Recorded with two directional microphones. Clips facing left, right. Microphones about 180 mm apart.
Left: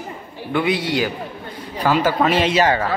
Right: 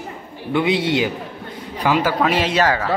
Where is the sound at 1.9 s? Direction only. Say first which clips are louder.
Left 1 dB; 10° right (ahead or behind).